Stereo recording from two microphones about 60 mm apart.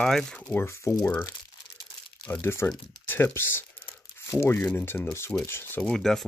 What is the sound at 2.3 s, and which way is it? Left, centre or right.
Speech, left.